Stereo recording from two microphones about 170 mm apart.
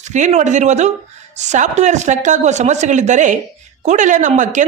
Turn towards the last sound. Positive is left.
turn(degrees=-45)  # may be behind; listen again after turning